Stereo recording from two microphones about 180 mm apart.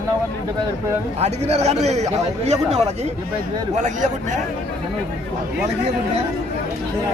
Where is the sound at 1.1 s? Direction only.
35° right (ahead or behind).